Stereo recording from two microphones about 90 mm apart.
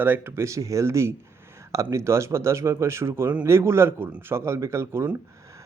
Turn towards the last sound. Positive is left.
turn(degrees=-30)  # may be behind; listen again after turning